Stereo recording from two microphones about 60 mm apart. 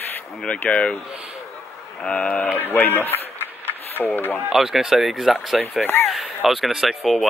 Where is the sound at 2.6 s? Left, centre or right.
Left.